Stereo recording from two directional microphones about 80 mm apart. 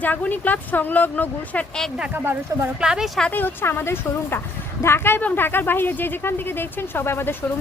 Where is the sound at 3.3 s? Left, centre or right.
Left.